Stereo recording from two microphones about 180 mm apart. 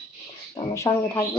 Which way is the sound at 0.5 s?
20° left (ahead or behind).